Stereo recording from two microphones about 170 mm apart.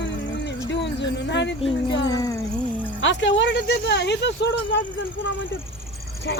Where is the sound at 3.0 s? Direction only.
90° left.